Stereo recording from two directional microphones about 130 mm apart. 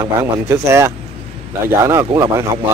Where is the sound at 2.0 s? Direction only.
25° right (ahead or behind).